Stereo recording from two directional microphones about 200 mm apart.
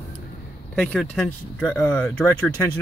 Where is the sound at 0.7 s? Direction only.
5° left (ahead or behind).